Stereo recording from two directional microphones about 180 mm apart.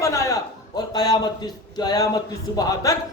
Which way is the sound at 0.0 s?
15° left (ahead or behind).